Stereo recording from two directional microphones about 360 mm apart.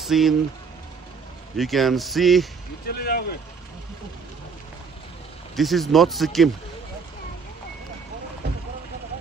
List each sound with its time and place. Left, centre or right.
0.0 s speech: centre
1.6 s speech: centre
2.9 s speech: left
5.6 s speech: centre